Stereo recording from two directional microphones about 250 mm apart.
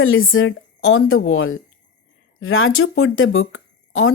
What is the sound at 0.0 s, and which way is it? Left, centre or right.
A woman's voice, left.